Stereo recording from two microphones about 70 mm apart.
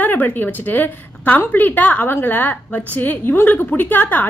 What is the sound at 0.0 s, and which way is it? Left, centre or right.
A woman's voice, left.